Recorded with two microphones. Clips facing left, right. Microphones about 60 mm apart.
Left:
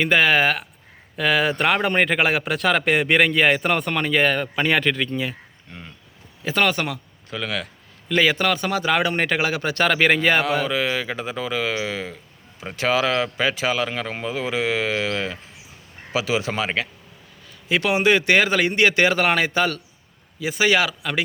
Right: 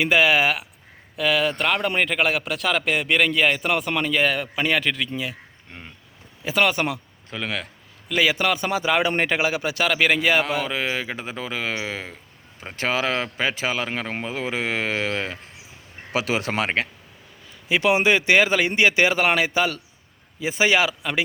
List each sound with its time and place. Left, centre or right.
0.0 s a man's voice: centre
6.4 s speech: centre
8.0 s speech: centre
10.7 s speech: right
16.1 s speech: right
17.7 s speech: centre
20.4 s speech: right